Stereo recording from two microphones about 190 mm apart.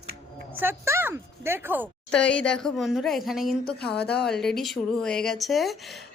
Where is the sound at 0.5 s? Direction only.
10° right (ahead or behind).